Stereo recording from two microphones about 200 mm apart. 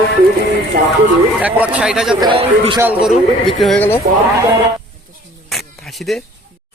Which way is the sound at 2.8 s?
5° right (ahead or behind).